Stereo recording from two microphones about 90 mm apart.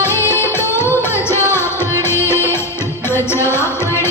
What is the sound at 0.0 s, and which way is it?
Music, 25° left (ahead or behind).